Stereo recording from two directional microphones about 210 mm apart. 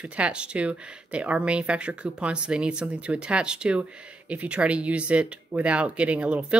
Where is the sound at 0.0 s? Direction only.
5° right (ahead or behind).